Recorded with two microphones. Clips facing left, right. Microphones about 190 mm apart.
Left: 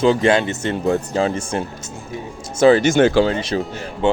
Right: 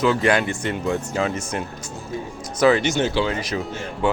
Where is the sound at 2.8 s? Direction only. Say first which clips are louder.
Left 7 dB; 50° left (ahead or behind).